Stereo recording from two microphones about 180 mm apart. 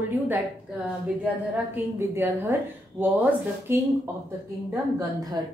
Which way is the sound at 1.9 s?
10° right (ahead or behind).